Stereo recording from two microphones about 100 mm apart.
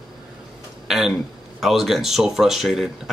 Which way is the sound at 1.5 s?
Centre (ahead or behind).